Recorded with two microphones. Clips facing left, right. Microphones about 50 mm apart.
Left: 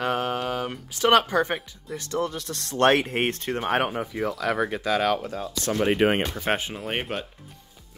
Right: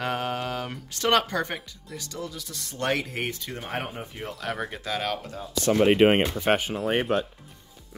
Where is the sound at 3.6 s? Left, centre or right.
Left.